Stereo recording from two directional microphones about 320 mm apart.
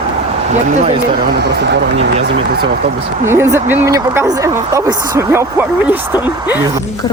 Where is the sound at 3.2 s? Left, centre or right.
Centre.